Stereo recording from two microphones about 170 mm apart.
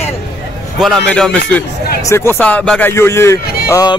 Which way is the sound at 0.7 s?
Centre (ahead or behind).